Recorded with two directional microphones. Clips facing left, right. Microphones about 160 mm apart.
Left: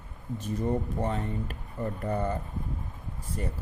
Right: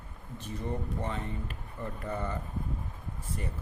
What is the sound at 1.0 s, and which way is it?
A man's voice, 40° left (ahead or behind).